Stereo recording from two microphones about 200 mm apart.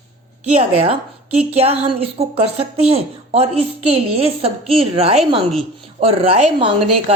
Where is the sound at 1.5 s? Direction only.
30° right (ahead or behind).